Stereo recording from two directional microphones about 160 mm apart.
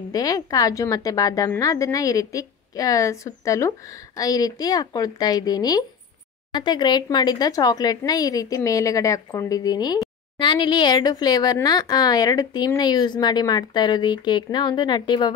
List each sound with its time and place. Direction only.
0.1 s speech: 25° left (ahead or behind)